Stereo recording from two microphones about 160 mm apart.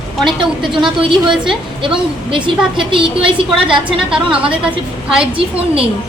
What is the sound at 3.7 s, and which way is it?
A woman's voice, 5° right (ahead or behind).